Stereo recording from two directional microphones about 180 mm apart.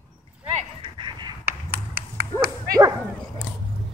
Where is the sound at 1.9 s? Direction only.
55° right (ahead or behind).